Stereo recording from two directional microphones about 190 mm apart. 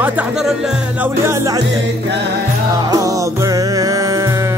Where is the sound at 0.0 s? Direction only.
10° right (ahead or behind).